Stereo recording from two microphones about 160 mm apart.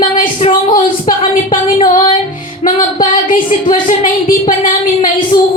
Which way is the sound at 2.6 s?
45° left (ahead or behind).